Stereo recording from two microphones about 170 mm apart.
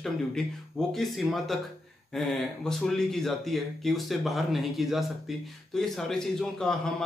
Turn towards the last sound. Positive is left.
turn(degrees=5)  # may be behind; listen again after turning